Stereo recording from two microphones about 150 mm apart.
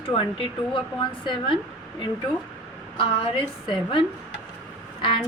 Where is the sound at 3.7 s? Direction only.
35° left (ahead or behind).